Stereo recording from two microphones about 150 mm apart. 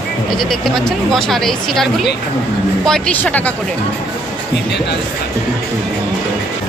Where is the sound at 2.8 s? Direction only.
10° left (ahead or behind).